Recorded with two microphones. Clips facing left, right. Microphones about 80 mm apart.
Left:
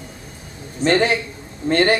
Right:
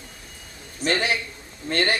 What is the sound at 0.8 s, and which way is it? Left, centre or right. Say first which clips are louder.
Speech: left 7 dB; left.